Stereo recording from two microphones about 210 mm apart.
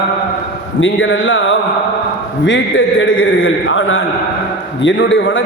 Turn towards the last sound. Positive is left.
turn(degrees=65)  # may be behind; listen again after turning